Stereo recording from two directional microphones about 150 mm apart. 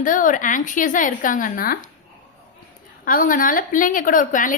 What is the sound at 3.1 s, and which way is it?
A woman's voice, 65° left (ahead or behind).